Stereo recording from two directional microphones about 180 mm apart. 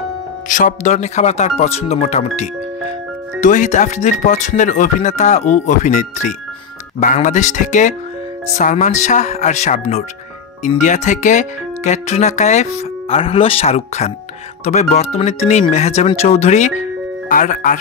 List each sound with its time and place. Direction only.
0.5 s speech: 45° left (ahead or behind)